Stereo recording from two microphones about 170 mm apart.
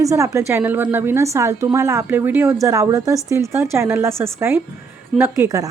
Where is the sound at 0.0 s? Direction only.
15° right (ahead or behind).